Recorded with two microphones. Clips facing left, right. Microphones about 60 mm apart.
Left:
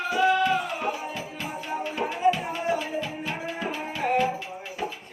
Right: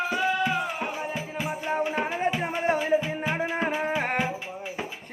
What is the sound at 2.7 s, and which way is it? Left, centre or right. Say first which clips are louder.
Music: right 1 dB; right.